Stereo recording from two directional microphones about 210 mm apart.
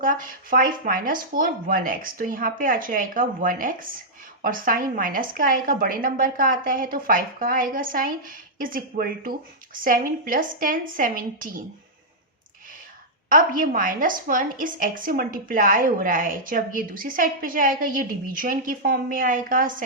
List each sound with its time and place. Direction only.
0.0 s a woman's voice: 40° right (ahead or behind)
13.2 s a woman's voice: 40° right (ahead or behind)